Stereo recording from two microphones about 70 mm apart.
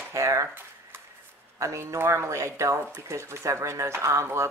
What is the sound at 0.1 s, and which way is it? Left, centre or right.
Speech, right.